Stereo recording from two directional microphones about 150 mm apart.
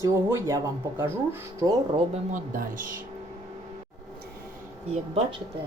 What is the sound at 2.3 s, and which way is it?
Speech, 65° right (ahead or behind).